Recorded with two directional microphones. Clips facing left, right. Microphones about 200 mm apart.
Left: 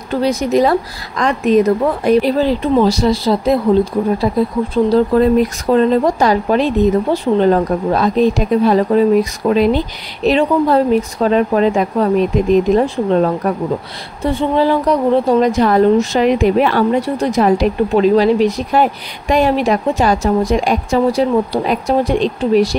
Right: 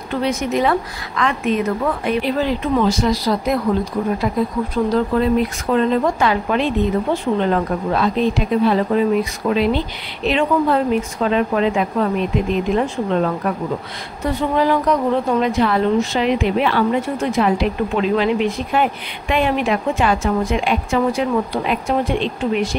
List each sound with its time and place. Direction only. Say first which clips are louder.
0.1 s a woman's voice: left 5 dB; 35° left (ahead or behind)
4.7 s a woman's voice: left 6 dB; 30° left (ahead or behind)